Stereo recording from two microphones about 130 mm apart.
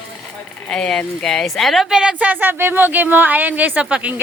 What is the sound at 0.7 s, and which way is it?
A woman's voice, 5° left (ahead or behind).